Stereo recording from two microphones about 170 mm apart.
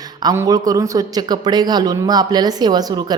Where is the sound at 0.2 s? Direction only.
20° right (ahead or behind).